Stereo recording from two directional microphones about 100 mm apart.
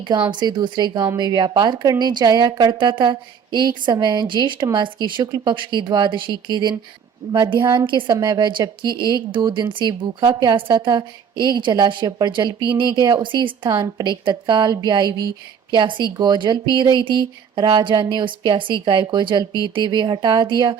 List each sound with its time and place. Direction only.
0.1 s a woman's voice: 50° right (ahead or behind)
7.2 s speech: 35° right (ahead or behind)
7.6 s a woman's voice: 50° right (ahead or behind)